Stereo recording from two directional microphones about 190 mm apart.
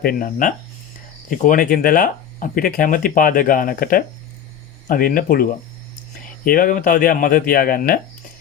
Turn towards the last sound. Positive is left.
turn(degrees=50)  # may be behind; listen again after turning